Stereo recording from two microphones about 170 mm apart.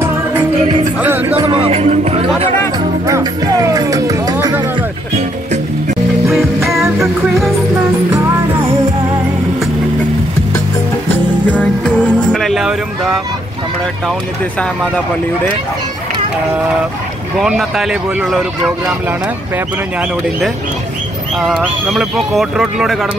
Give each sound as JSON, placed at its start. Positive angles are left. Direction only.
{"t": 1.3, "sound": "music", "side_deg": -30}
{"t": 3.1, "sound": "music", "side_deg": -20}
{"t": 7.0, "sound": "music", "side_deg": 0}
{"t": 11.4, "sound": "music", "side_deg": 10}
{"t": 17.4, "sound": "speech", "side_deg": 0}
{"t": 20.0, "sound": "speech", "side_deg": -5}